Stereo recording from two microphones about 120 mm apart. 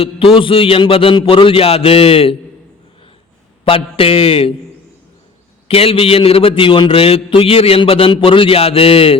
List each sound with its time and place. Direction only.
0.0 s a man's voice: 50° left (ahead or behind)
3.6 s a man's voice: 50° left (ahead or behind)
5.6 s a man's voice: 50° left (ahead or behind)